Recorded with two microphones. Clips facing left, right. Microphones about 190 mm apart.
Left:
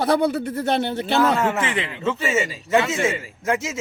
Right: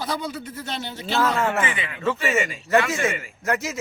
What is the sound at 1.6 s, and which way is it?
Speech, 90° left.